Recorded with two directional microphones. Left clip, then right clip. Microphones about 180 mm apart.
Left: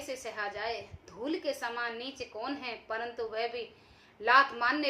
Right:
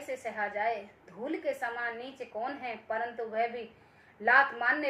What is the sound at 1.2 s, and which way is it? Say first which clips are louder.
A woman's voice: right 1 dB; 20° left (ahead or behind).